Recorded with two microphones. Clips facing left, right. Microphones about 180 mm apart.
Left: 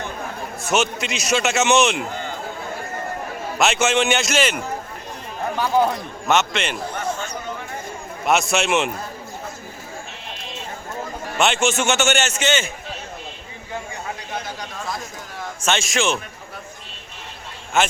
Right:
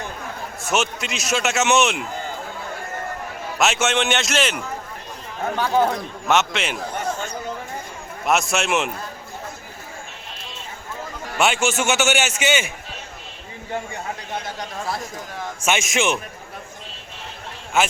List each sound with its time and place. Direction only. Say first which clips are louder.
0.7 s a man's voice: left 2 dB; centre (ahead or behind)
3.6 s a man's voice: left 2 dB; 5° right (ahead or behind)
5.5 s a man's voice: even; centre (ahead or behind)
8.3 s a man's voice: left 1 dB; centre (ahead or behind)
11.3 s a man's voice: left 1 dB; 10° right (ahead or behind)
15.6 s a man's voice: even; 15° right (ahead or behind)